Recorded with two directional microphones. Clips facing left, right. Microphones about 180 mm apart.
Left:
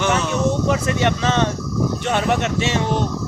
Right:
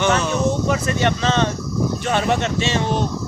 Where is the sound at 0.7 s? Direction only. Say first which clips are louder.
Left 1 dB; 20° left (ahead or behind).